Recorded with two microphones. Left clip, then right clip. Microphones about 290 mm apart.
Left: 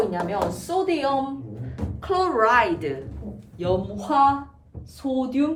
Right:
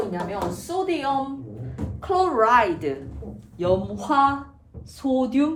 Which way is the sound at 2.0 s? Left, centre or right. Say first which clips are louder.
Right 1 dB; centre.